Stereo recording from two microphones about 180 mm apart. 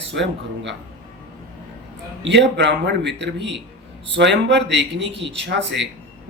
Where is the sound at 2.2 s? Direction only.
80° right.